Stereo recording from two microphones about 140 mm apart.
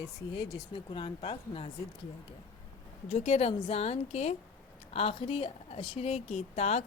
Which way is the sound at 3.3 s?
45° left (ahead or behind).